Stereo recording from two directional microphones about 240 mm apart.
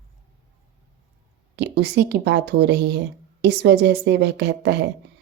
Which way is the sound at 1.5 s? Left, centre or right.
Right.